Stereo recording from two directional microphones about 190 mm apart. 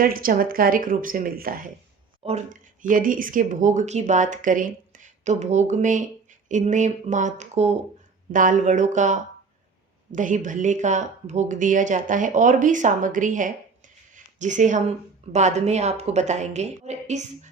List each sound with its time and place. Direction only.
0.0 s speech: 50° right (ahead or behind)